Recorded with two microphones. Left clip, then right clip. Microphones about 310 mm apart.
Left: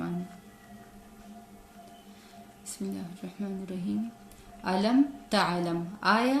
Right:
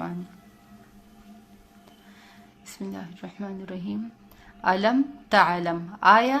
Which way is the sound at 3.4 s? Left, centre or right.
Right.